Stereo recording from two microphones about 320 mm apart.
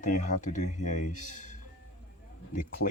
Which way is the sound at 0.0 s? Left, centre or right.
Left.